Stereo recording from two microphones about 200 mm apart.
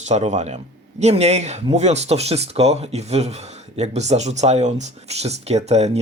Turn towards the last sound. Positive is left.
turn(degrees=-30)  # may be behind; listen again after turning